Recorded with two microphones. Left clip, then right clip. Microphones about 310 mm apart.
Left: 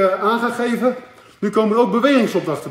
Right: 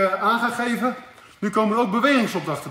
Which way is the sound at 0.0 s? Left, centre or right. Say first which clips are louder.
Left 3 dB; centre.